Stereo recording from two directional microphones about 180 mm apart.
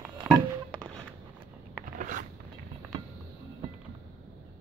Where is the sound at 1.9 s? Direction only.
45° right (ahead or behind).